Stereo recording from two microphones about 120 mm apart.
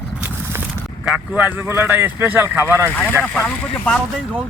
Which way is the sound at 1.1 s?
5° right (ahead or behind).